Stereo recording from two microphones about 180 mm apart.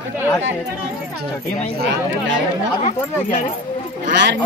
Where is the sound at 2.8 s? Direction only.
45° left (ahead or behind).